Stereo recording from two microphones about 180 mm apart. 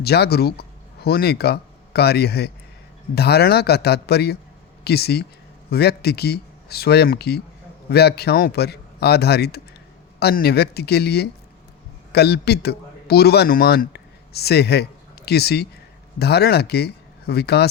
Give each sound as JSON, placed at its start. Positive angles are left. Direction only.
{"t": 0.0, "sound": "a man's voice", "side_deg": 60}